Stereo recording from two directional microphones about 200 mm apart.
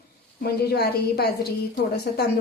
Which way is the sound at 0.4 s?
50° left (ahead or behind).